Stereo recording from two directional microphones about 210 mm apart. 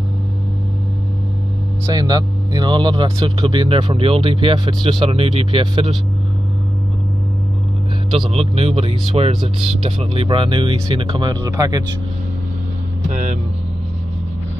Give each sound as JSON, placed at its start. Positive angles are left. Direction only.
{"t": 2.0, "sound": "speech", "side_deg": -20}
{"t": 8.1, "sound": "speech", "side_deg": -25}
{"t": 13.1, "sound": "speech", "side_deg": -40}